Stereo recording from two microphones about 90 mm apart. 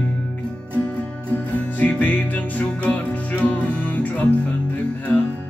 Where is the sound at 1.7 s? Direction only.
20° left (ahead or behind).